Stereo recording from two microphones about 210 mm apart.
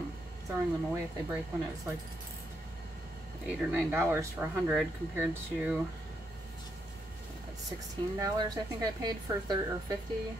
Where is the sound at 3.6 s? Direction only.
10° right (ahead or behind).